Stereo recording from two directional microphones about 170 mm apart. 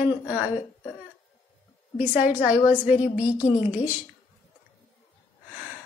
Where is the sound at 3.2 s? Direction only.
20° left (ahead or behind).